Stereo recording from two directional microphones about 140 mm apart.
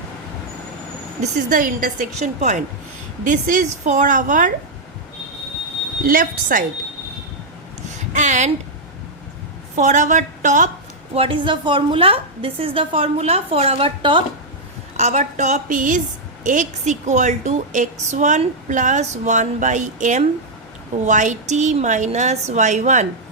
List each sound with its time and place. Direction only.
1.2 s a woman's voice: 75° right (ahead or behind)
6.0 s a woman's voice: 80° right
7.9 s a sound: 60° right (ahead or behind)
9.7 s a woman's voice: 60° right (ahead or behind)
11.1 s a woman's voice: 40° right (ahead or behind)
14.9 s a woman's voice: 55° right (ahead or behind)